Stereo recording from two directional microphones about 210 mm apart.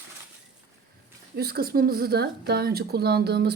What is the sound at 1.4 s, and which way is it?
A woman's voice, 45° right (ahead or behind).